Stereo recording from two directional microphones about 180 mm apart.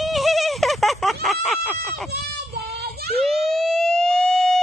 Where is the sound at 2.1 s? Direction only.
65° right (ahead or behind).